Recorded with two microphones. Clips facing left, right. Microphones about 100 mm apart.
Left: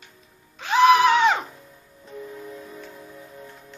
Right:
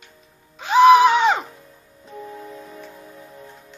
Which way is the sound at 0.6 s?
15° right (ahead or behind).